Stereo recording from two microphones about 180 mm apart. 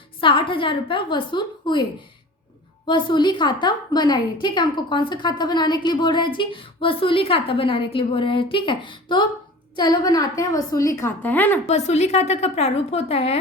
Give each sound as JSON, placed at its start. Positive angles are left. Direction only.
{"t": 0.2, "sound": "a woman's voice", "side_deg": 30}
{"t": 2.8, "sound": "a woman's voice", "side_deg": 25}
{"t": 11.7, "sound": "a woman's voice", "side_deg": 35}